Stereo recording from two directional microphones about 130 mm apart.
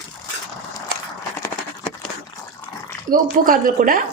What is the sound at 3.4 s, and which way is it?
Speech, 90° right.